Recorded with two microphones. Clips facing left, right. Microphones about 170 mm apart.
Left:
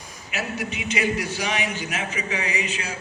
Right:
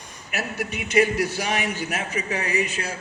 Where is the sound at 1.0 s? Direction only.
40° right (ahead or behind).